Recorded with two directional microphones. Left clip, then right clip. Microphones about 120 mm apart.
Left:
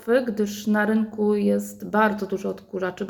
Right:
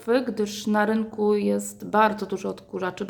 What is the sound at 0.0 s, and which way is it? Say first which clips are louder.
A woman's voice: left 2 dB; 20° right (ahead or behind).